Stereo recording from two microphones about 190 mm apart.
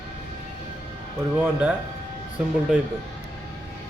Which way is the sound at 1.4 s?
5° right (ahead or behind).